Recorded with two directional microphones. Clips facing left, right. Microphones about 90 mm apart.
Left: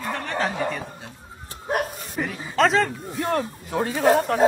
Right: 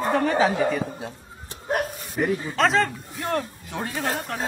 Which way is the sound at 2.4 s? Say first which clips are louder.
Left 5 dB; centre (ahead or behind).